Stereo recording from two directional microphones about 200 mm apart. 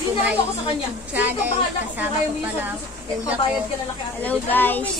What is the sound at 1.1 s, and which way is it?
Speech, 10° right (ahead or behind).